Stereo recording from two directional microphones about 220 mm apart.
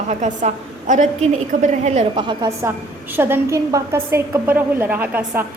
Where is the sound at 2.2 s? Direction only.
20° right (ahead or behind).